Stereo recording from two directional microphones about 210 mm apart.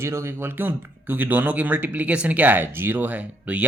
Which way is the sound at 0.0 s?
10° right (ahead or behind).